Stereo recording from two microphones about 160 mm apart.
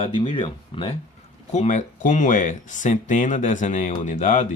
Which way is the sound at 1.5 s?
50° left (ahead or behind).